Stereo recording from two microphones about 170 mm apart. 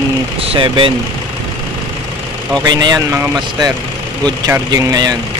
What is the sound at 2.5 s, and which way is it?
Speech, 25° right (ahead or behind).